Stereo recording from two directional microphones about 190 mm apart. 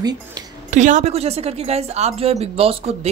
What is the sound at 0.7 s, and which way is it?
Speech, 40° right (ahead or behind).